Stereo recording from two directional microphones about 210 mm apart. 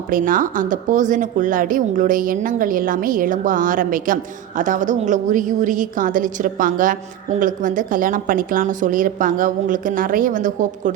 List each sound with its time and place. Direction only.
0.1 s speech: 40° right (ahead or behind)